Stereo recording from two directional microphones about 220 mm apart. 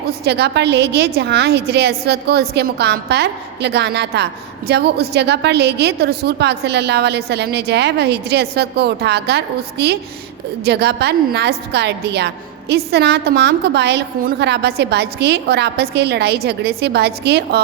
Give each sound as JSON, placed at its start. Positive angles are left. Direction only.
{"t": 0.1, "sound": "a woman's voice", "side_deg": -50}